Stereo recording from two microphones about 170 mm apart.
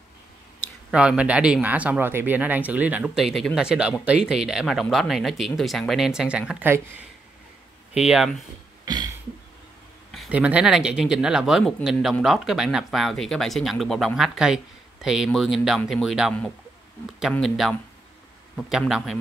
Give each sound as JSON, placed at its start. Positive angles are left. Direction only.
{"t": 0.9, "sound": "speech", "side_deg": -5}
{"t": 7.9, "sound": "speech", "side_deg": -5}
{"t": 8.8, "sound": "a sound", "side_deg": -25}
{"t": 10.1, "sound": "speech", "side_deg": -5}